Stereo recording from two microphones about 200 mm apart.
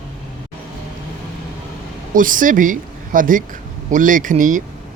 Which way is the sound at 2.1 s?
40° right (ahead or behind).